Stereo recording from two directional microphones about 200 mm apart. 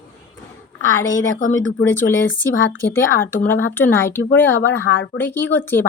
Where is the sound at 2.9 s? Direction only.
10° left (ahead or behind).